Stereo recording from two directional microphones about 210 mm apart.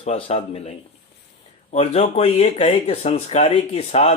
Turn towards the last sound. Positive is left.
turn(degrees=30)  # may be behind; listen again after turning